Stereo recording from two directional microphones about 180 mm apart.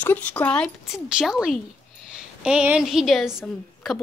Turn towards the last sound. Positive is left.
turn(degrees=0)  # may be behind; listen again after turning